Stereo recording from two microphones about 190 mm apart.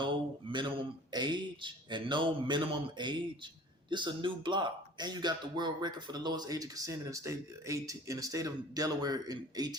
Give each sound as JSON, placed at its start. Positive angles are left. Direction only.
{"t": 0.0, "sound": "mantra", "side_deg": -25}
{"t": 1.1, "sound": "a man's voice", "side_deg": -25}